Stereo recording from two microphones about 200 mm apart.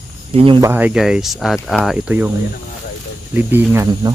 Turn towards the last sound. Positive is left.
turn(degrees=-15)  # may be behind; listen again after turning